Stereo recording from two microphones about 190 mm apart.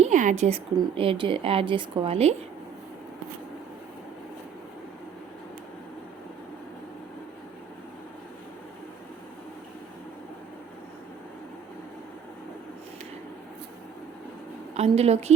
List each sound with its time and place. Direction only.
0.0 s a woman's voice: 40° right (ahead or behind)
14.8 s a woman's voice: 35° right (ahead or behind)